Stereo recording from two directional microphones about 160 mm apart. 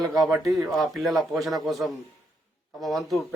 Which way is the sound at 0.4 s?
Centre (ahead or behind).